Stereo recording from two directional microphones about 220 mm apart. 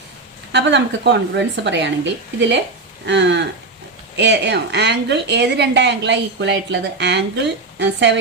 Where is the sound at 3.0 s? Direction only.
55° right (ahead or behind).